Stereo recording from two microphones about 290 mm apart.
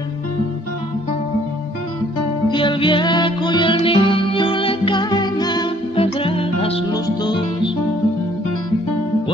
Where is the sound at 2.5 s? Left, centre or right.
Centre.